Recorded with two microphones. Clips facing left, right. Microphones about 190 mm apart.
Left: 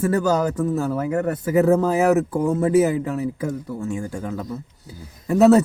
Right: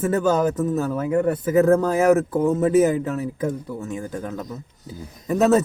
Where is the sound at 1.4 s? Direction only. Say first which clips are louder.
Left 1 dB; 15° left (ahead or behind).